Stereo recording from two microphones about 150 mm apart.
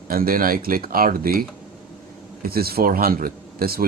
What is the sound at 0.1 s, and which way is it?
Speech, 75° right (ahead or behind).